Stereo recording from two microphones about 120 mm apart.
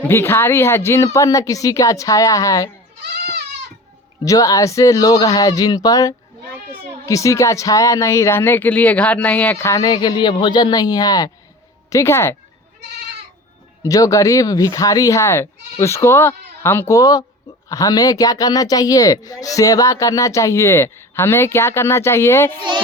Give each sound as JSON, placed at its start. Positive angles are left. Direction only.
{"t": 0.1, "sound": "speech", "side_deg": 20}
{"t": 4.3, "sound": "speech", "side_deg": 30}
{"t": 9.6, "sound": "speech", "side_deg": 25}
{"t": 13.8, "sound": "speech", "side_deg": 25}
{"t": 17.0, "sound": "speech", "side_deg": 30}